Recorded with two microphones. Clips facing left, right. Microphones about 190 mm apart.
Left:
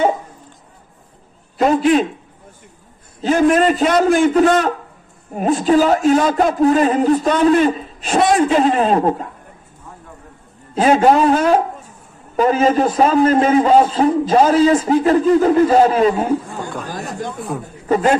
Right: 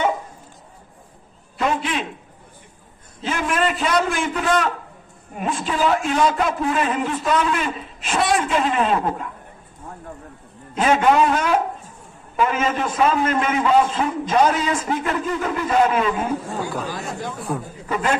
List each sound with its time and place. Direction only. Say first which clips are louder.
1.6 s a sound: left 9 dB; 40° left (ahead or behind)
3.2 s a man's voice: left 9 dB; 40° left (ahead or behind)
10.7 s a man's voice: left 5 dB; 35° left (ahead or behind)
16.9 s chatter: left 2 dB; 40° left (ahead or behind)
17.5 s a man's voice: right 2 dB; centre (ahead or behind)
17.8 s a man's voice: left 8 dB; 40° left (ahead or behind)